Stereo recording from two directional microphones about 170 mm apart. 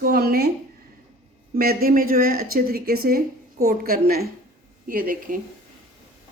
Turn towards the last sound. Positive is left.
turn(degrees=-55)  # may be behind; listen again after turning